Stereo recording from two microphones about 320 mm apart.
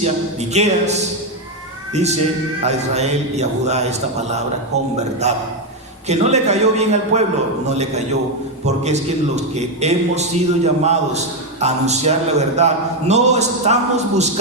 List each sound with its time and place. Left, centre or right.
0.0 s a man's voice: right
8.6 s a man's voice: right